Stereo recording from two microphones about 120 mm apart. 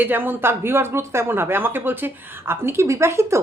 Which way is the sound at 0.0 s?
15° right (ahead or behind).